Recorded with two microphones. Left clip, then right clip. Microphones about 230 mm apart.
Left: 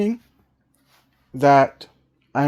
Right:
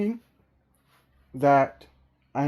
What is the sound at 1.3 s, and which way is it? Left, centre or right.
Speech, left.